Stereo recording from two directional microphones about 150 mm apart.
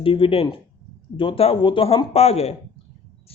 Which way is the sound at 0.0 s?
35° left (ahead or behind).